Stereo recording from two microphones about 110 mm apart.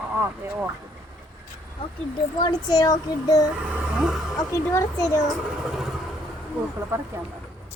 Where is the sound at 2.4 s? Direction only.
40° left (ahead or behind).